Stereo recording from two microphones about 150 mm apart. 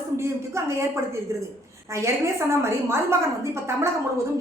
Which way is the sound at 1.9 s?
20° right (ahead or behind).